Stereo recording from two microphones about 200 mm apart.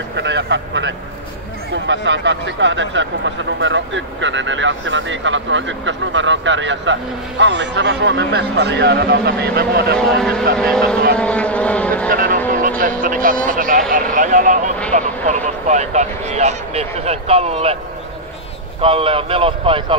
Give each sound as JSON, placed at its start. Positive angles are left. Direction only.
{"t": 0.1, "sound": "speech", "side_deg": -60}
{"t": 10.6, "sound": "speech", "side_deg": 5}
{"t": 11.1, "sound": "vehicle", "side_deg": 5}
{"t": 12.1, "sound": "speech", "side_deg": -45}
{"t": 18.8, "sound": "speech", "side_deg": -30}